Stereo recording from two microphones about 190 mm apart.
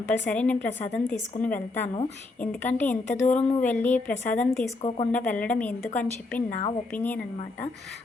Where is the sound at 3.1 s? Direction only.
35° left (ahead or behind).